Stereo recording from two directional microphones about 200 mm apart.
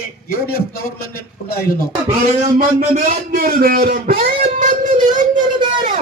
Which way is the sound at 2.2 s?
35° right (ahead or behind).